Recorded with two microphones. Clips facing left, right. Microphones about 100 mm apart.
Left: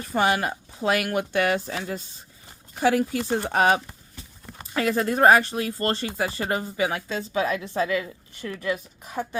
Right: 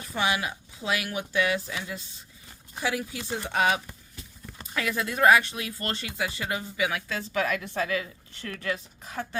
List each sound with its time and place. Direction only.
0.1 s speech: 45° left (ahead or behind)
7.1 s a woman's voice: 20° left (ahead or behind)
8.4 s speech: 15° left (ahead or behind)